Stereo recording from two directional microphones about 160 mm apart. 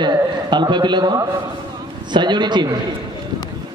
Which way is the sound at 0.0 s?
25° right (ahead or behind).